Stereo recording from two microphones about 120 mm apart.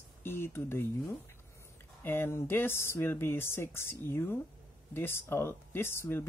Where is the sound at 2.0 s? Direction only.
20° left (ahead or behind).